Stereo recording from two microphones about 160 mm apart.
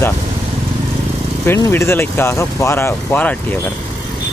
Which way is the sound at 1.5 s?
15° left (ahead or behind).